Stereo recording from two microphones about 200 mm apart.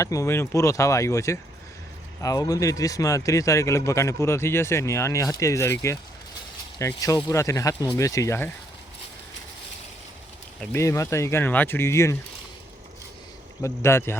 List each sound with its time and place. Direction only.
0.0 s a man's voice: 15° left (ahead or behind)
10.6 s a man's voice: 10° left (ahead or behind)
13.6 s a man's voice: 15° left (ahead or behind)